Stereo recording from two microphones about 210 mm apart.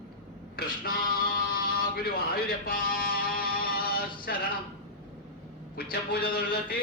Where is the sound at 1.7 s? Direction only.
45° left (ahead or behind).